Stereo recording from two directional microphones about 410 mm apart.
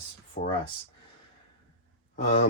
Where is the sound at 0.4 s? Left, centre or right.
Left.